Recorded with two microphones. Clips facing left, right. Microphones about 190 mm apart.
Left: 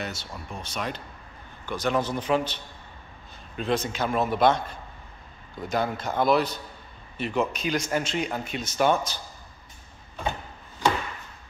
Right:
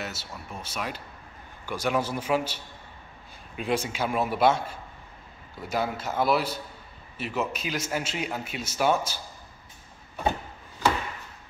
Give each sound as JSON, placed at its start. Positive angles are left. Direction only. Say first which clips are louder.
{"t": 0.0, "sound": "a man's voice", "louder": "left 2 dB", "side_deg": -5}